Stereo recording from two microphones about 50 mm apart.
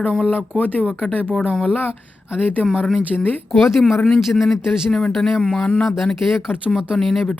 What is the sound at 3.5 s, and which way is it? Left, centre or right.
Speech, centre.